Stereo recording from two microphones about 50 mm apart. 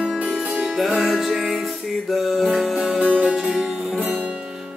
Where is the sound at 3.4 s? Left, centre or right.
Centre.